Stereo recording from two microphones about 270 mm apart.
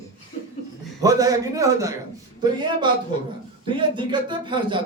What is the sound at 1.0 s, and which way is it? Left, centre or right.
A man's voice, centre.